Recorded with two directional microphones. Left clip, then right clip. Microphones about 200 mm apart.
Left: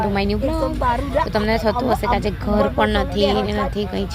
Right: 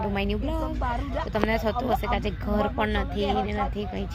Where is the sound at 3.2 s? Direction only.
45° left (ahead or behind).